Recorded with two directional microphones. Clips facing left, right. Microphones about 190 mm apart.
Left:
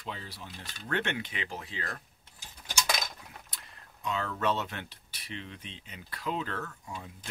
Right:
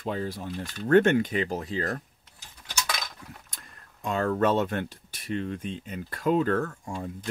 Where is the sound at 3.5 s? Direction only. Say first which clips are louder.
Right 1 dB; 50° right (ahead or behind).